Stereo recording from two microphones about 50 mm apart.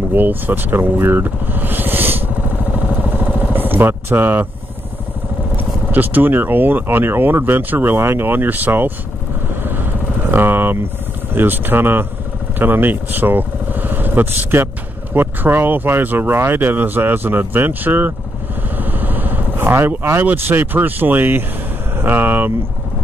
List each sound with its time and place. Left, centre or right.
0.1 s speech: right
3.2 s vehicle: right
5.9 s speech: right
9.6 s vehicle: right
10.3 s speech: right
18.8 s vehicle: right
20.0 s speech: right